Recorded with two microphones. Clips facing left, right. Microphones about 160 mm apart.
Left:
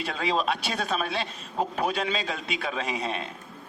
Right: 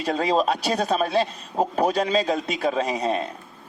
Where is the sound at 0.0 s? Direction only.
40° right (ahead or behind).